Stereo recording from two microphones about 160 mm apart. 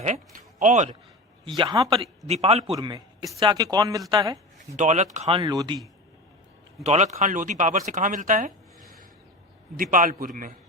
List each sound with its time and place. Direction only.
0.0 s speech: 50° right (ahead or behind)
1.5 s speech: 25° right (ahead or behind)
2.0 s a man's voice: 40° right (ahead or behind)
2.7 s a man's voice: 25° right (ahead or behind)
4.8 s speech: 50° right (ahead or behind); by 5.8 s 25° right (ahead or behind)
6.8 s speech: 45° right (ahead or behind)
9.7 s a man's voice: 60° right (ahead or behind)